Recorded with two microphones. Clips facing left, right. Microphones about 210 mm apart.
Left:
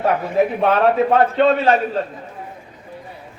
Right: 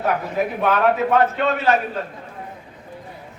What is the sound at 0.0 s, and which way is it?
A man's voice, 30° left (ahead or behind).